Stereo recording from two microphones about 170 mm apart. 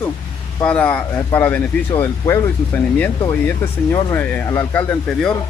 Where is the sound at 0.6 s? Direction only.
10° left (ahead or behind).